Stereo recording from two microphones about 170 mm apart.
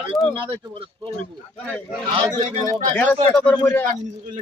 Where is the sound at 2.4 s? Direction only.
40° right (ahead or behind).